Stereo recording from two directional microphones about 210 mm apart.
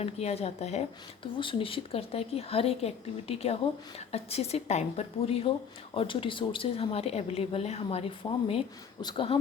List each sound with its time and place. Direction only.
0.0 s a woman's voice: 30° left (ahead or behind)